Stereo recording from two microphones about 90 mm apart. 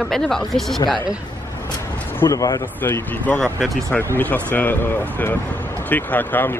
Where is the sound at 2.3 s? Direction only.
45° left (ahead or behind).